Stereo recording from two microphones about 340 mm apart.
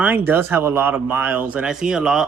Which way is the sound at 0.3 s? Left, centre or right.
Centre.